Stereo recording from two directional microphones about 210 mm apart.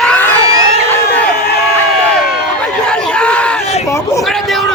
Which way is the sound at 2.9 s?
5° left (ahead or behind).